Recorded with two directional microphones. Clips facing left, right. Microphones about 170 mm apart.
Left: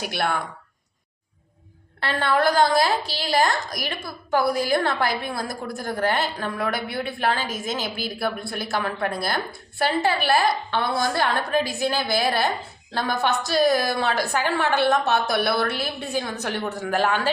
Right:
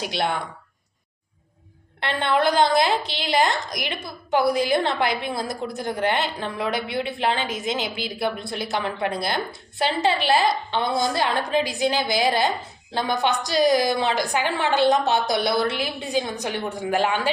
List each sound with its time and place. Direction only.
0.0 s a woman's voice: 20° right (ahead or behind)
2.0 s a woman's voice: 20° right (ahead or behind)